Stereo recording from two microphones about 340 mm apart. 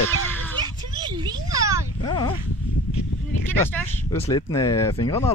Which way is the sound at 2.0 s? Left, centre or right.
Centre.